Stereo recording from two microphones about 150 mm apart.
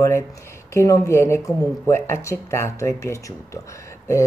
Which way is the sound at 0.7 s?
20° left (ahead or behind).